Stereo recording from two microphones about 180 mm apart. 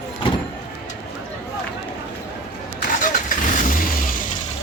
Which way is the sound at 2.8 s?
45° left (ahead or behind).